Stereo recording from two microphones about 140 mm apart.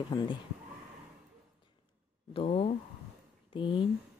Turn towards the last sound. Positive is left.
turn(degrees=35)  # may be behind; listen again after turning